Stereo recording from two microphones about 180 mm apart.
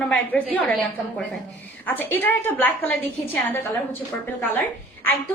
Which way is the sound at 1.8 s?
10° left (ahead or behind).